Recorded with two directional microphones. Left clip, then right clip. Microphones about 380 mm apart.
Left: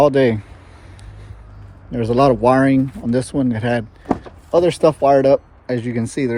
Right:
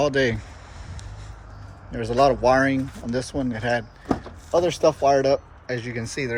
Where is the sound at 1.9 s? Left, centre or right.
Centre.